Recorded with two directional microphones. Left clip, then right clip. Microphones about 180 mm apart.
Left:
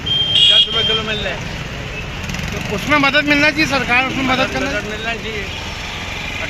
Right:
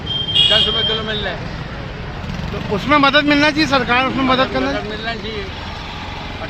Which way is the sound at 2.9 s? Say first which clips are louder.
Right 1 dB; 50° right (ahead or behind).